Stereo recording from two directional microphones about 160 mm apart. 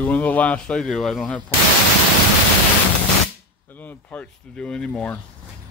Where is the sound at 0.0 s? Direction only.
10° left (ahead or behind).